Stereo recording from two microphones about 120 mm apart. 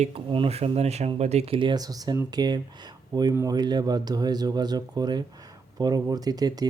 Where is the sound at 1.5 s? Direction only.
35° right (ahead or behind).